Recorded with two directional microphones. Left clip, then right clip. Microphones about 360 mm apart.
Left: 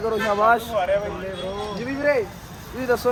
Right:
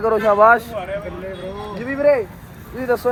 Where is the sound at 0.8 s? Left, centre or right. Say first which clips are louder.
Left 5 dB; left.